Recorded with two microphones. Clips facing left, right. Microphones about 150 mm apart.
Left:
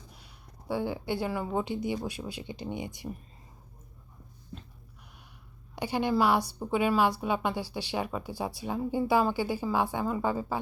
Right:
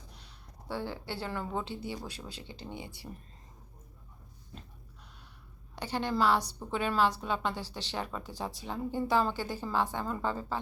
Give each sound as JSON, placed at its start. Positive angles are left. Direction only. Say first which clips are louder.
{"t": 0.7, "sound": "a woman's voice", "louder": "left 6 dB", "side_deg": 15}
{"t": 5.7, "sound": "a woman's voice", "louder": "left 5 dB", "side_deg": 10}